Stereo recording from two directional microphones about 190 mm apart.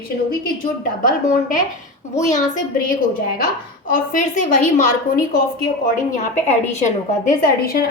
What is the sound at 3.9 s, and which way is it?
A woman's voice, 40° left (ahead or behind).